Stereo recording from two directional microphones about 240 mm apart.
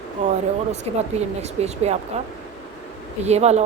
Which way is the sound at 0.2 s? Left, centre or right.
Right.